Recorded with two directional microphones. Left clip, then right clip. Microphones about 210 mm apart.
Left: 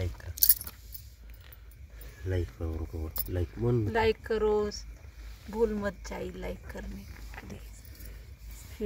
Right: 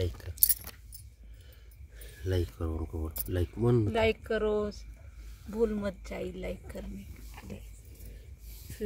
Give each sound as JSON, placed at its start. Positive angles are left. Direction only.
{"t": 0.4, "sound": "a sound", "side_deg": 30}
{"t": 2.2, "sound": "speech", "side_deg": -15}
{"t": 3.9, "sound": "speech", "side_deg": 15}
{"t": 5.5, "sound": "speech", "side_deg": 5}